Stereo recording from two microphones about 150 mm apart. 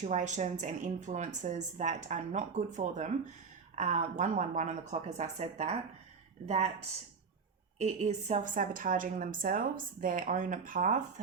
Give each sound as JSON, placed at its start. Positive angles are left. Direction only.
{"t": 0.0, "sound": "a woman's voice", "side_deg": -55}
{"t": 7.8, "sound": "a woman's voice", "side_deg": -50}